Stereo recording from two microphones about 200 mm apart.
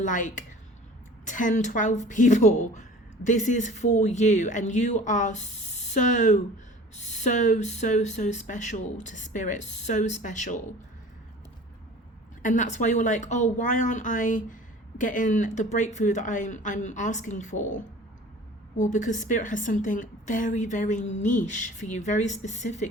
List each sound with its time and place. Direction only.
0.0 s a woman's voice: 40° left (ahead or behind)
12.4 s a woman's voice: 40° left (ahead or behind)
18.8 s a woman's voice: 40° left (ahead or behind)